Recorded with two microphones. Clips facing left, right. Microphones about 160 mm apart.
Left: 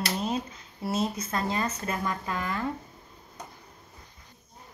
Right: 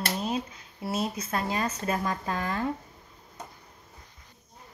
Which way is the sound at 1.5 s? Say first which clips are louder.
Right 1 dB; 20° right (ahead or behind).